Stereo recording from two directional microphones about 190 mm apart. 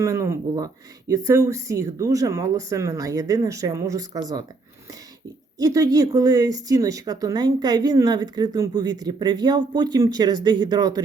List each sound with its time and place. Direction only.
0.0 s speech: 15° right (ahead or behind)
5.5 s speech: 20° right (ahead or behind)